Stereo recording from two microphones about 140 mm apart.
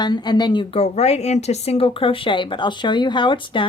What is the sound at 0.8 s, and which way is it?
A woman's voice, 50° left (ahead or behind).